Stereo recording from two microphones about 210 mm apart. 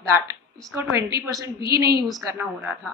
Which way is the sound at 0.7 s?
15° right (ahead or behind).